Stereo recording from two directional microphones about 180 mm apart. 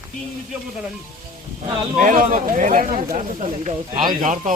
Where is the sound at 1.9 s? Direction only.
45° right (ahead or behind).